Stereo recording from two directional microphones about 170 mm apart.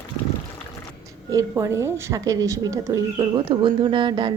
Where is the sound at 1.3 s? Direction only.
20° right (ahead or behind).